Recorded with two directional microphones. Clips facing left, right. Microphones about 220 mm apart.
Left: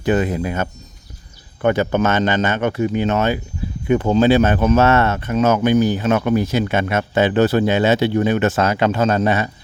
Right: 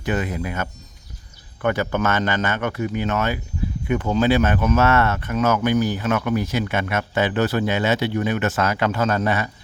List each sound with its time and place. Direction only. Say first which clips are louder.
0.0 s speech: left 6 dB; 30° left (ahead or behind)